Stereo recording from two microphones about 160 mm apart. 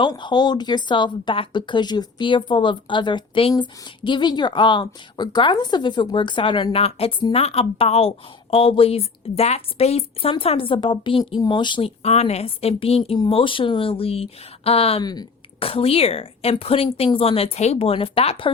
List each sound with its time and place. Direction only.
0.0 s speech: 30° left (ahead or behind)
15.0 s speech: 25° left (ahead or behind)